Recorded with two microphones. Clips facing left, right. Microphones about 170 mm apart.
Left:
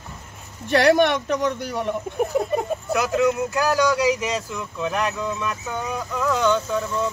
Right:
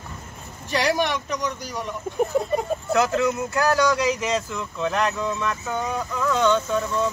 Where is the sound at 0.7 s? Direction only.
55° left (ahead or behind).